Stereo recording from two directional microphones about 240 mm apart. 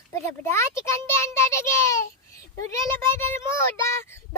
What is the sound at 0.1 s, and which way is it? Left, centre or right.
A child's voice, centre.